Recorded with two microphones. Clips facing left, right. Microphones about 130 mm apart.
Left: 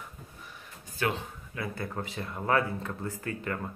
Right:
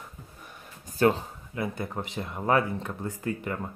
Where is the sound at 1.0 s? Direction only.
35° right (ahead or behind).